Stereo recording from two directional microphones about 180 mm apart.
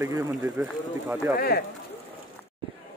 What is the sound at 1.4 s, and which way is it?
Speech, 60° left (ahead or behind).